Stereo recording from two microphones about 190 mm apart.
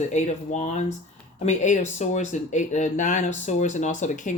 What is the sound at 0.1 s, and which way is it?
Speech, 35° left (ahead or behind).